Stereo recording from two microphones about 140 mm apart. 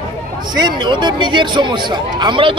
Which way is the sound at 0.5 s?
35° right (ahead or behind).